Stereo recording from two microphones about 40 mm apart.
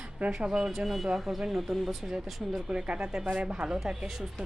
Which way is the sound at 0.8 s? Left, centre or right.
Centre.